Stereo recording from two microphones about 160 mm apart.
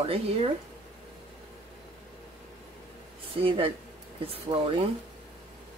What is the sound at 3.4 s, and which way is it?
Speech, 35° right (ahead or behind).